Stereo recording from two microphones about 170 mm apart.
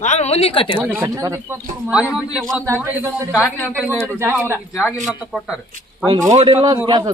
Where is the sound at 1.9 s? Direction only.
5° right (ahead or behind).